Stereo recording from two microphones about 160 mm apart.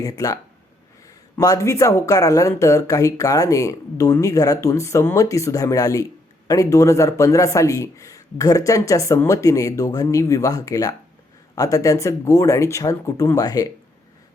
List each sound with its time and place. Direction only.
0.0 s speech: 25° left (ahead or behind)
1.4 s speech: 20° left (ahead or behind)